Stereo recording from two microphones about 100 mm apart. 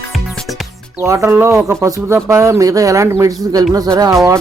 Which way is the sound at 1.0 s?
30° right (ahead or behind).